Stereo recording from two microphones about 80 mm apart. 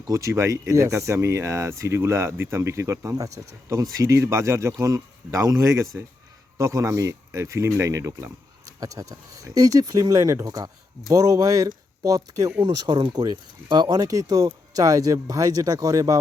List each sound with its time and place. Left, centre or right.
0.1 s speech: right
12.6 s speech: right
13.7 s speech: right